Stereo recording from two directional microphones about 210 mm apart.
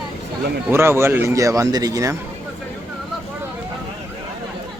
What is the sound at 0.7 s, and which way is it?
A man's voice, 10° right (ahead or behind).